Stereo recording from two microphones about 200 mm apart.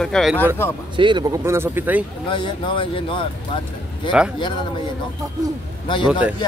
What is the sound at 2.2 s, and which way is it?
Speech, 25° left (ahead or behind).